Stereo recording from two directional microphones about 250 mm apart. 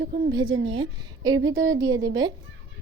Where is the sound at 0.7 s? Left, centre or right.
Centre.